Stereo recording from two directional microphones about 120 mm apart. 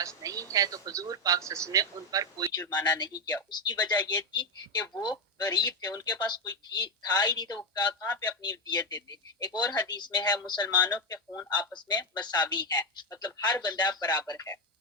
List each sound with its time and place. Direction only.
0.2 s a sound: 30° right (ahead or behind)
0.5 s a man's voice: 30° right (ahead or behind)
2.5 s speech: 35° left (ahead or behind)